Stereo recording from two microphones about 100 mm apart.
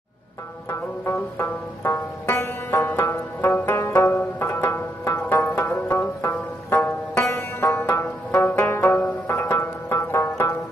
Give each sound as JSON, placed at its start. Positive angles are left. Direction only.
{"t": 0.7, "sound": "music", "side_deg": 25}